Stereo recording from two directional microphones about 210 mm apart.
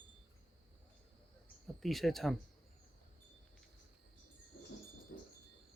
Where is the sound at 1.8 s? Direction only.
Centre (ahead or behind).